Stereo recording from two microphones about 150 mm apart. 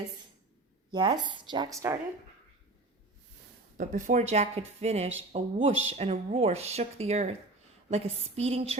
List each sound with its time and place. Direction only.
0.9 s speech: 30° right (ahead or behind)
3.8 s speech: 55° right (ahead or behind); by 8.7 s 40° right (ahead or behind)